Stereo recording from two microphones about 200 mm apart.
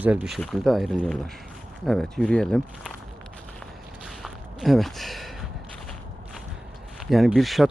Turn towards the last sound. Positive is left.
turn(degrees=0)  # may be behind; listen again after turning